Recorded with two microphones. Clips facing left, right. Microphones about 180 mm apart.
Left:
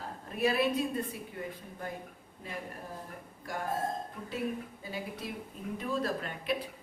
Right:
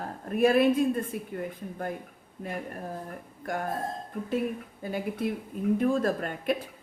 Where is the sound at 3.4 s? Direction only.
55° right (ahead or behind).